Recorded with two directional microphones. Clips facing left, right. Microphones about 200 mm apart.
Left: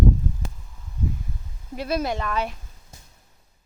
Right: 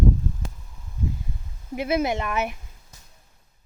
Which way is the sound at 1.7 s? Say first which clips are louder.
Right 2 dB; 20° right (ahead or behind).